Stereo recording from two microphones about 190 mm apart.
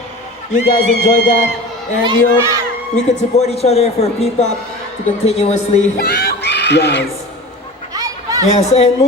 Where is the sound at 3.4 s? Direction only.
35° left (ahead or behind).